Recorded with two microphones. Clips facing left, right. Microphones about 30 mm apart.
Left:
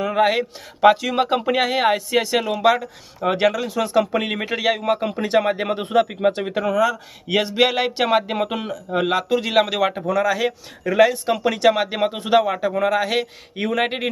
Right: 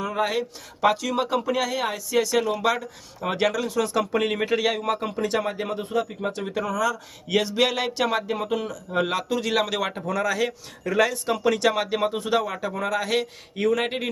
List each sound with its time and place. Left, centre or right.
0.0 s a sound: left
0.8 s speech: left
5.8 s speech: left
9.0 s speech: centre